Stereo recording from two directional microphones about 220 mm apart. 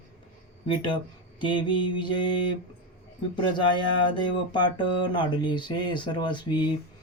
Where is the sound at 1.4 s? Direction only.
20° left (ahead or behind).